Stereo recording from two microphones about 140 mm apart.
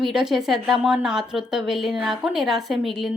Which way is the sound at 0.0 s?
5° right (ahead or behind).